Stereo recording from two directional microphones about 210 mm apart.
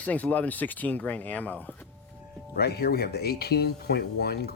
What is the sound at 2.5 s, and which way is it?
Speech, 50° left (ahead or behind).